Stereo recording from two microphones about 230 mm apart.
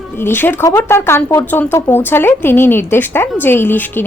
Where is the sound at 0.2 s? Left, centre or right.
Centre.